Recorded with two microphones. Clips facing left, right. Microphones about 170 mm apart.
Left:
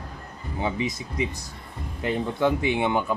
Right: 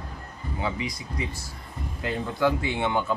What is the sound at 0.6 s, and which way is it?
Speech, 20° left (ahead or behind).